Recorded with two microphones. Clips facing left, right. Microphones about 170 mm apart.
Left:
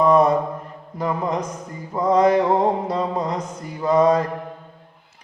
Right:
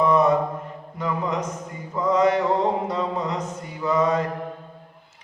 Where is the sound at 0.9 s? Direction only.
35° left (ahead or behind).